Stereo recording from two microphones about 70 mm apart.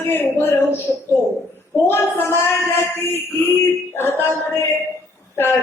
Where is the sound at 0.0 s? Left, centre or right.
Left.